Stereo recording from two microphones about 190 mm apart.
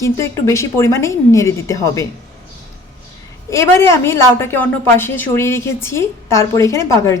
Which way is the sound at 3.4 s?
15° left (ahead or behind).